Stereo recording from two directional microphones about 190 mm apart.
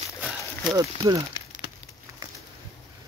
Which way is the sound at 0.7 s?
20° right (ahead or behind).